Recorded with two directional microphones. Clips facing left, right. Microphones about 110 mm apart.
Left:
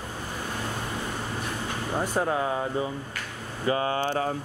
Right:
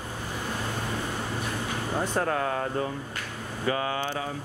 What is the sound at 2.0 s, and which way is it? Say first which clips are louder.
Speech: left 1 dB; 10° left (ahead or behind).